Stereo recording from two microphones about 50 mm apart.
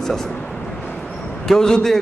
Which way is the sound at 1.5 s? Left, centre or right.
Centre.